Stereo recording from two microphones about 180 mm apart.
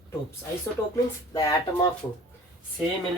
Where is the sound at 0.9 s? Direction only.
20° left (ahead or behind).